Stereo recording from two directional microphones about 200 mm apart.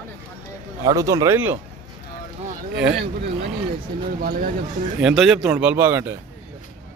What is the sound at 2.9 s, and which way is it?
Speech, 55° right (ahead or behind).